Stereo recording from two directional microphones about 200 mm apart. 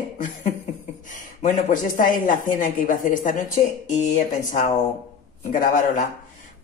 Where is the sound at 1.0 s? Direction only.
40° left (ahead or behind).